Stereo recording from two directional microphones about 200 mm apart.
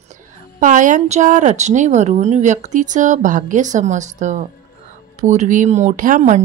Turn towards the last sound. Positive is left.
turn(degrees=-40)  # may be behind; listen again after turning